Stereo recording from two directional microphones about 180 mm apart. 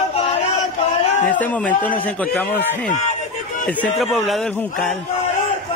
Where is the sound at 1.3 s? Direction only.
10° left (ahead or behind).